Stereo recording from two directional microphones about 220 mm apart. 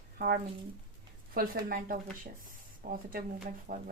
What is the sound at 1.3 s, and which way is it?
Speech, 40° right (ahead or behind).